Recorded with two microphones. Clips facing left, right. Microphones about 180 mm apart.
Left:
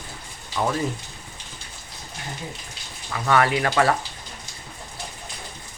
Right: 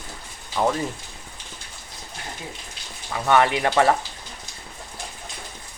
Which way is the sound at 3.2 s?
25° right (ahead or behind).